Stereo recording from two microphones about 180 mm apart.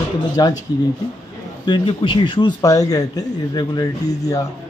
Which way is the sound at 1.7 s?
25° left (ahead or behind).